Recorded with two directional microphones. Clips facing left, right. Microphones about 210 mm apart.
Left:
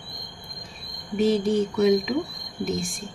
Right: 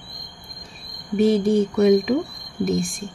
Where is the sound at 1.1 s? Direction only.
55° right (ahead or behind).